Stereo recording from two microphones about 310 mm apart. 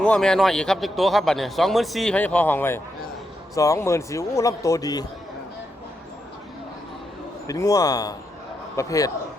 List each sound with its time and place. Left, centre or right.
0.0 s a man's voice: centre
7.4 s a man's voice: centre